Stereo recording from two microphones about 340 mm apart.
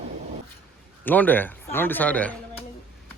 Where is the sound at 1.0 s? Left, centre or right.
Centre.